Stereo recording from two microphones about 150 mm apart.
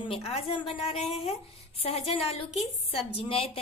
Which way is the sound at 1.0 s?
Centre (ahead or behind).